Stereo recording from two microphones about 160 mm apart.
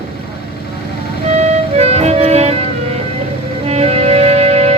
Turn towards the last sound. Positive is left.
turn(degrees=-40)  # may be behind; listen again after turning